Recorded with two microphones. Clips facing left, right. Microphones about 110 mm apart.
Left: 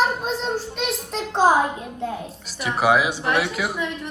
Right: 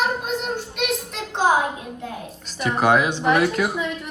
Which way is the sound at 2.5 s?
5° left (ahead or behind).